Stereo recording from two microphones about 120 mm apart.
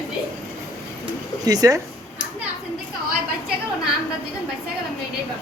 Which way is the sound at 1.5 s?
30° right (ahead or behind).